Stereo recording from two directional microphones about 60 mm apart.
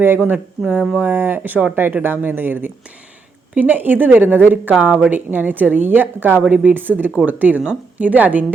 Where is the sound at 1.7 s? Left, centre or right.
Right.